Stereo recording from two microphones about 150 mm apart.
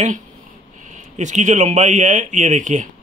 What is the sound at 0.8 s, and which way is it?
Speech, 55° right (ahead or behind).